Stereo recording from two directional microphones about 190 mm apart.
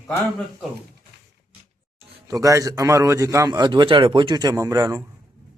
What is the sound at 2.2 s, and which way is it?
A man's voice, 15° right (ahead or behind).